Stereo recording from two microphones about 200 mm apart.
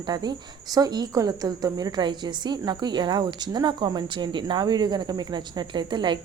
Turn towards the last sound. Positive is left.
turn(degrees=-20)  # may be behind; listen again after turning